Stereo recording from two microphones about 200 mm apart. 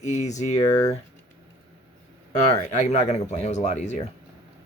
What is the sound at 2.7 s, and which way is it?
Speech, 35° left (ahead or behind).